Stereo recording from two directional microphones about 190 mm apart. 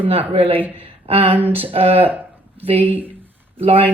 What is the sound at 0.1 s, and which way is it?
Speech, 30° right (ahead or behind).